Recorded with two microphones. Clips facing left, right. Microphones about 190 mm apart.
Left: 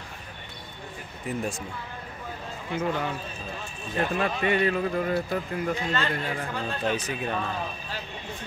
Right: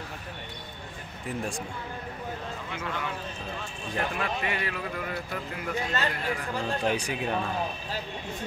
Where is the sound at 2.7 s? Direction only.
30° left (ahead or behind).